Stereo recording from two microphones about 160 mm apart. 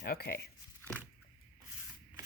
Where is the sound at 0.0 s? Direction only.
75° left (ahead or behind).